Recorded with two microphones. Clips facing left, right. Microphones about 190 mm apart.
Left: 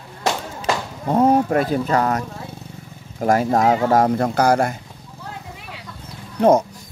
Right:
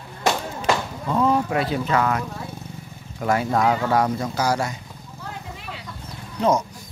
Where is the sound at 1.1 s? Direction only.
45° left (ahead or behind).